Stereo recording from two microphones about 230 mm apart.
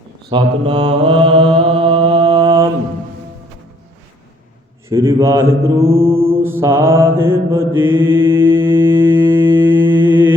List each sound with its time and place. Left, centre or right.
0.3 s mantra: right
4.9 s a man's voice: centre
6.3 s mantra: centre